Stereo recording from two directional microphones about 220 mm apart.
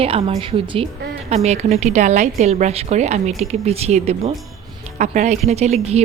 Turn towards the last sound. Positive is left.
turn(degrees=-30)  # may be behind; listen again after turning